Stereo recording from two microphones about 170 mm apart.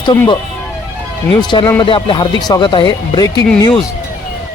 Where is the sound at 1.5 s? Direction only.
25° left (ahead or behind).